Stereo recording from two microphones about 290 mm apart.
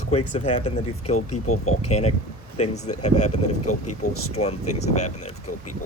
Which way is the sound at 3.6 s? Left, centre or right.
Left.